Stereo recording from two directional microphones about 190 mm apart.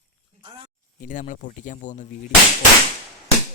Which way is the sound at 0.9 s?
45° left (ahead or behind).